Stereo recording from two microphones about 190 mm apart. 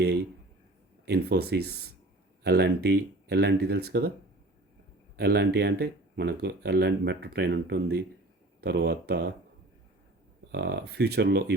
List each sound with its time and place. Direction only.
1.0 s speech: 60° right (ahead or behind)
5.1 s speech: 55° right (ahead or behind)
10.5 s speech: 60° right (ahead or behind)